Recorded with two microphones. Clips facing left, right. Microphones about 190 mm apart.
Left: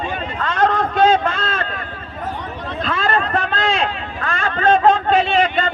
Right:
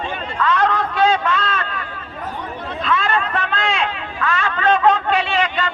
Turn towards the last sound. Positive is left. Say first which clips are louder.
# left 3 dB
turn(degrees=35)  # may be behind; listen again after turning